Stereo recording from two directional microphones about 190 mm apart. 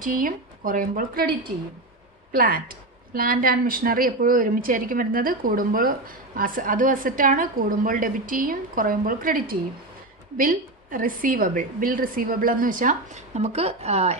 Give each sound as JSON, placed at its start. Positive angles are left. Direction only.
{"t": 0.0, "sound": "speech", "side_deg": -45}
{"t": 2.3, "sound": "speech", "side_deg": -45}